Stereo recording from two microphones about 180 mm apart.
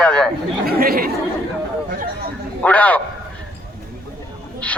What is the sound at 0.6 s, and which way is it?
Speech, 55° right (ahead or behind).